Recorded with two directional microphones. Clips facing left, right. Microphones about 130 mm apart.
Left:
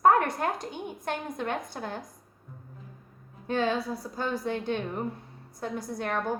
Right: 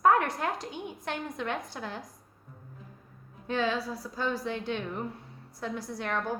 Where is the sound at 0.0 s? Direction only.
45° left (ahead or behind).